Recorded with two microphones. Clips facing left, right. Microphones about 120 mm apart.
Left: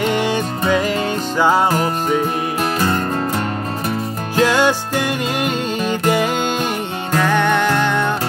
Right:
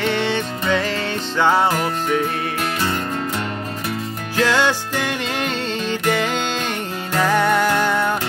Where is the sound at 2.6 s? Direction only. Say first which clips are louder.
Left 5 dB; 45° left (ahead or behind).